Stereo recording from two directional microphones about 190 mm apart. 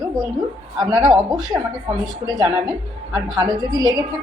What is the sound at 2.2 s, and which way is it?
A woman's voice, 20° right (ahead or behind).